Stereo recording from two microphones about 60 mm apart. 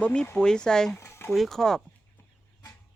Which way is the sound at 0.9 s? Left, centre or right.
Left.